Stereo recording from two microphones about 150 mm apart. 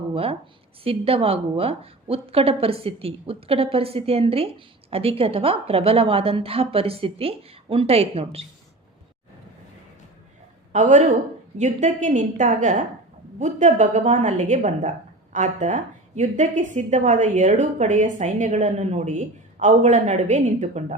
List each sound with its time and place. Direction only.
0.1 s a woman's voice: 40° right (ahead or behind)
10.7 s a woman's voice: 55° right (ahead or behind)